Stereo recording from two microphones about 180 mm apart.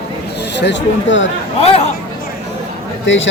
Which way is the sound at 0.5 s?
80° left.